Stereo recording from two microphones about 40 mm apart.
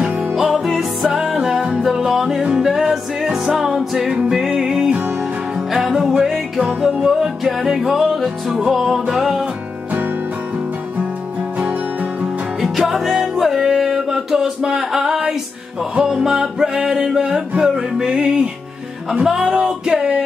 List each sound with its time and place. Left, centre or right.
0.0 s music: centre
6.6 s music: right
7.4 s music: centre
12.6 s music: centre
19.3 s music: right